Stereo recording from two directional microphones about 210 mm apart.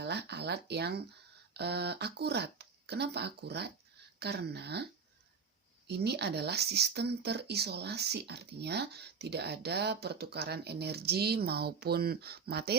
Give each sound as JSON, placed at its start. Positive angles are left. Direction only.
{"t": 0.0, "sound": "speech", "side_deg": -50}
{"t": 5.9, "sound": "speech", "side_deg": -50}